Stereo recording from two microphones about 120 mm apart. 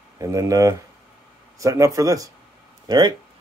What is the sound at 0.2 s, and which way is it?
Speech, 25° right (ahead or behind).